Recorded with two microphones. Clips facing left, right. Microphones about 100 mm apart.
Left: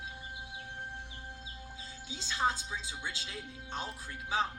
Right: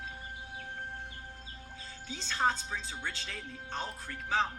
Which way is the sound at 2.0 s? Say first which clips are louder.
Right 2 dB; 50° right (ahead or behind).